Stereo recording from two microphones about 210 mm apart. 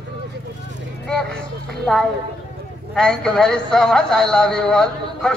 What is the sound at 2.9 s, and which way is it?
Speech, 5° left (ahead or behind).